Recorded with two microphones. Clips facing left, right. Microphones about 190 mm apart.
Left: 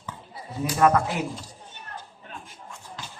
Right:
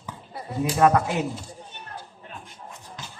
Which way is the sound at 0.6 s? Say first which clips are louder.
Right 1 dB; 20° right (ahead or behind).